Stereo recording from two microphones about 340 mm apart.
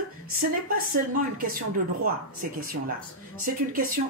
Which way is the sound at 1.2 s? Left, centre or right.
Right.